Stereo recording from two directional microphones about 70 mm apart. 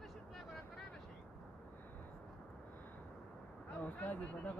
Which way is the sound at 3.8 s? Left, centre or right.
Left.